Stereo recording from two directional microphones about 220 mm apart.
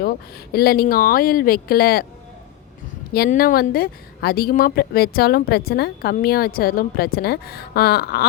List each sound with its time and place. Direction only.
0.5 s speech: 45° left (ahead or behind)
3.1 s speech: 45° left (ahead or behind)